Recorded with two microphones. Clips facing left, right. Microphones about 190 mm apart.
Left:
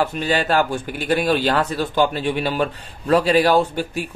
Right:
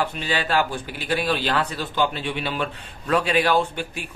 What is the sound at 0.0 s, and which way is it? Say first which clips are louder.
Speech: left 5 dB; 45° left (ahead or behind).